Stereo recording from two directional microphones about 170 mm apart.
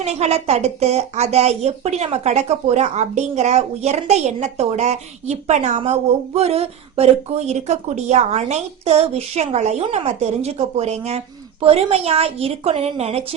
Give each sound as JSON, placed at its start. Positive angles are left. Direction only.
{"t": 0.0, "sound": "speech", "side_deg": -40}